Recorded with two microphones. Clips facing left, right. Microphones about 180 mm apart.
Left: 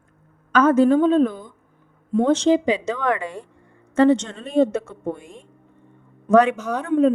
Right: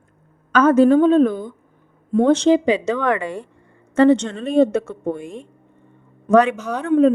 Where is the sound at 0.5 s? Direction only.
75° right (ahead or behind).